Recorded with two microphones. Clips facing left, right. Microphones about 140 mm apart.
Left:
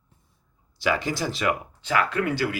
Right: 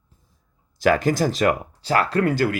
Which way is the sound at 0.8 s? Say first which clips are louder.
Right 7 dB; 45° right (ahead or behind).